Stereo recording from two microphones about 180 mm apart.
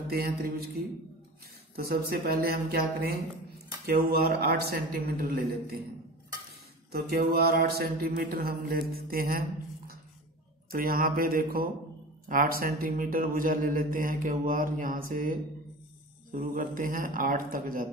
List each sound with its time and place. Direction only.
0.1 s mantra: 55° right (ahead or behind)
6.9 s mantra: 60° right (ahead or behind)
10.7 s a man's voice: 55° right (ahead or behind)